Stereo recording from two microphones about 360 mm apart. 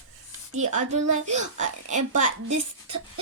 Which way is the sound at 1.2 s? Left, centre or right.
Centre.